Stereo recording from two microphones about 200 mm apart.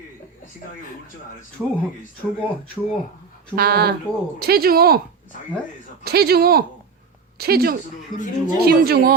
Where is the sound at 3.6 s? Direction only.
50° right (ahead or behind).